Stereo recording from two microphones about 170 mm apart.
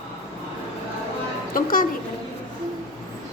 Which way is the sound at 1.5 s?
55° left (ahead or behind).